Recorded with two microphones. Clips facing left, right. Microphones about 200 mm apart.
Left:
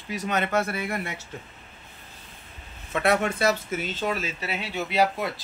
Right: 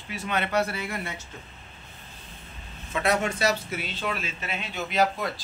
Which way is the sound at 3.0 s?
55° left (ahead or behind).